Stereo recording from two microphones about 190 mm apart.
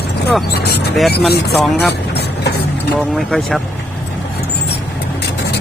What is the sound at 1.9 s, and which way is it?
Vehicle, 60° left (ahead or behind).